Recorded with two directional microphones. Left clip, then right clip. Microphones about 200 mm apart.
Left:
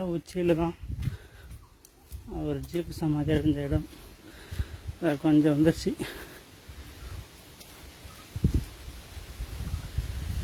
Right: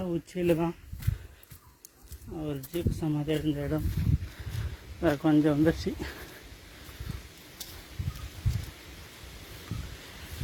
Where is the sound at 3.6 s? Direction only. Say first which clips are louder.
Left 1 dB; 20° left (ahead or behind).